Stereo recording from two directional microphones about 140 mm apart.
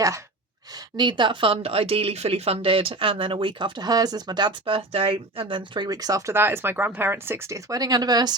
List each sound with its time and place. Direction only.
0.9 s speech: 35° right (ahead or behind)